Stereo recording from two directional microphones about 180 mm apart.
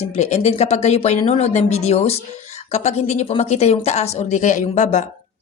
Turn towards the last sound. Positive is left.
turn(degrees=40)  # may be behind; listen again after turning